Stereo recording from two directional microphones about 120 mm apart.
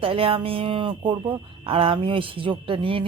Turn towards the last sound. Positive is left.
turn(degrees=-50)  # may be behind; listen again after turning